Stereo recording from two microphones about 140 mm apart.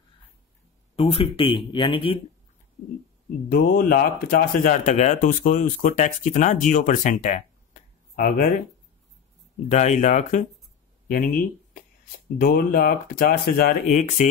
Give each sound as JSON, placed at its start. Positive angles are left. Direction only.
{"t": 0.9, "sound": "speech", "side_deg": 40}
{"t": 3.4, "sound": "speech", "side_deg": 90}
{"t": 9.7, "sound": "speech", "side_deg": 55}
{"t": 11.1, "sound": "speech", "side_deg": 85}
{"t": 13.9, "sound": "speech", "side_deg": 60}